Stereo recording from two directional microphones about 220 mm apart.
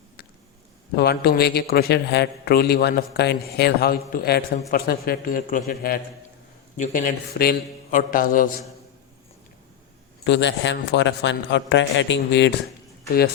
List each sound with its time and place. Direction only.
0.9 s a man's voice: 45° left (ahead or behind)
10.2 s a man's voice: 55° left (ahead or behind)